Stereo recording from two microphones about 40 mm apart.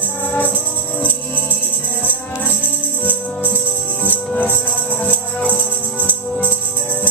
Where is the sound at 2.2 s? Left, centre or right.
Left.